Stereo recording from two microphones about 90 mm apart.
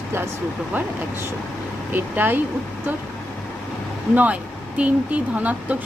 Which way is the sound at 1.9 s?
20° right (ahead or behind).